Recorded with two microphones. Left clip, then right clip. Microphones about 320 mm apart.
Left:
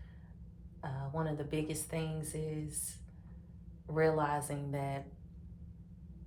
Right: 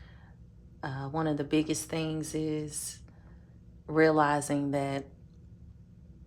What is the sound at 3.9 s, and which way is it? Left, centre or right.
A woman's voice, right.